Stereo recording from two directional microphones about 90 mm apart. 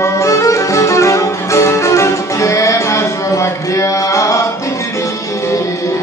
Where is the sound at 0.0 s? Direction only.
35° left (ahead or behind).